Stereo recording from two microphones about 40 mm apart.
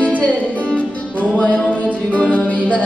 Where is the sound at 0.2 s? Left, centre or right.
Left.